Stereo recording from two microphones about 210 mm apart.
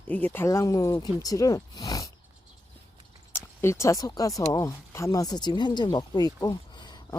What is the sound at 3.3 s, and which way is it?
Speech, 10° left (ahead or behind).